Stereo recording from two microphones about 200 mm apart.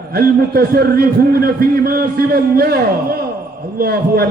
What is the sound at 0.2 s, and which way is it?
A man's voice, 50° right (ahead or behind).